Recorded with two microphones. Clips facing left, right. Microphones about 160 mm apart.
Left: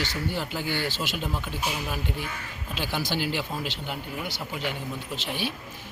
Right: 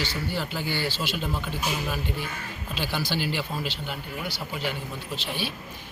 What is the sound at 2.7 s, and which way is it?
Speech, 15° left (ahead or behind).